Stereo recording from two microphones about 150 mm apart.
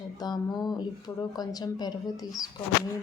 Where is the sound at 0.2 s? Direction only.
25° left (ahead or behind).